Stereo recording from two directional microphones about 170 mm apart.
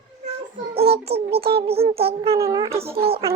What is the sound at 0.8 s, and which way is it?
A child's voice, 35° right (ahead or behind).